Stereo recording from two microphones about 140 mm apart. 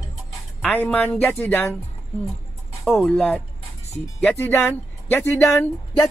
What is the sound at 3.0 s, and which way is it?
Speech, 10° left (ahead or behind).